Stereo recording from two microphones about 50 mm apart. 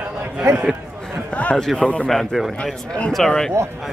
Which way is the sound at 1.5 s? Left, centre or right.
Centre.